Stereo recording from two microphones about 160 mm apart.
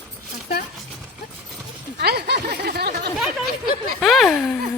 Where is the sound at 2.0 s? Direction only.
90° right.